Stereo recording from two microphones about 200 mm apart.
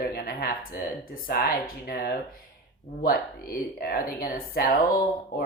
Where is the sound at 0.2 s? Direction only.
50° left (ahead or behind).